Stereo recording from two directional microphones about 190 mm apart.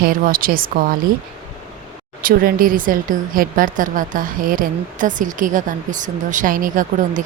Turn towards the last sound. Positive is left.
turn(degrees=-45)  # may be behind; listen again after turning